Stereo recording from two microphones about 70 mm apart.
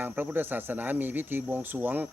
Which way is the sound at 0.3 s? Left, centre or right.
Right.